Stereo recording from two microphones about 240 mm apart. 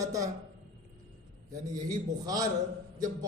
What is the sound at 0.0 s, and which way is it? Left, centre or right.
Speech, centre.